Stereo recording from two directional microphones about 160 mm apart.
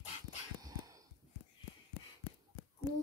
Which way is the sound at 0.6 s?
20° right (ahead or behind).